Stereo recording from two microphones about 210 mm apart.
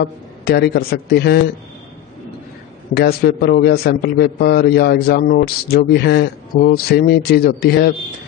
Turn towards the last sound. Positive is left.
turn(degrees=50)  # may be behind; listen again after turning